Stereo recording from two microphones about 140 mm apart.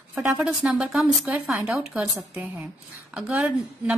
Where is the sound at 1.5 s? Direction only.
15° right (ahead or behind).